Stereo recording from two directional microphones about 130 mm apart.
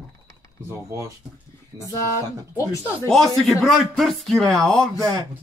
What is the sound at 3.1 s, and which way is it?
Speech, centre (ahead or behind).